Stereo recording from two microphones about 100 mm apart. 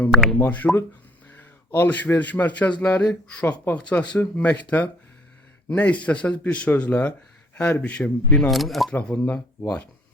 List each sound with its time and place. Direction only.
0.3 s speech: 15° left (ahead or behind)
1.8 s speech: 20° left (ahead or behind); by 8.9 s centre (ahead or behind)
8.9 s speech: 15° left (ahead or behind)